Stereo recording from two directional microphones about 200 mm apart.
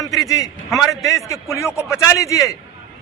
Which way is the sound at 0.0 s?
15° left (ahead or behind).